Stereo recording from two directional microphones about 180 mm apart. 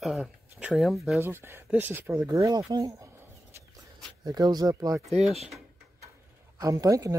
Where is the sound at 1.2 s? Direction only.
10° right (ahead or behind).